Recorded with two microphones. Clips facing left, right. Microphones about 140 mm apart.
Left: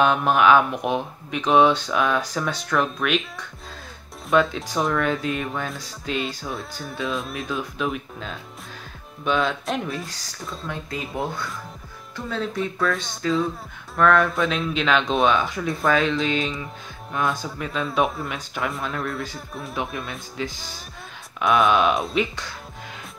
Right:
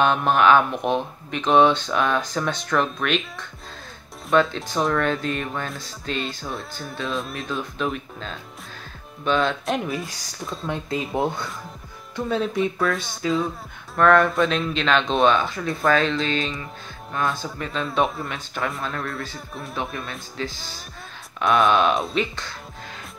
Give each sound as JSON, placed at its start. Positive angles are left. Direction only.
{"t": 0.0, "sound": "speech", "side_deg": 5}
{"t": 10.7, "sound": "speech", "side_deg": -25}
{"t": 12.3, "sound": "speech", "side_deg": -15}
{"t": 12.8, "sound": "speech", "side_deg": -5}
{"t": 20.4, "sound": "speech", "side_deg": 10}
{"t": 21.4, "sound": "speech", "side_deg": 0}